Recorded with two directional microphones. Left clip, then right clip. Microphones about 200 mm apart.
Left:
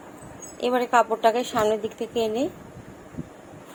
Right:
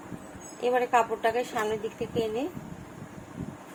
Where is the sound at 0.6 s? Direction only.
45° left (ahead or behind).